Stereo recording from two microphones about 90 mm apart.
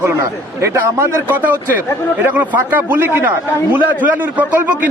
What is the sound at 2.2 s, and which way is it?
A man's voice, 20° right (ahead or behind).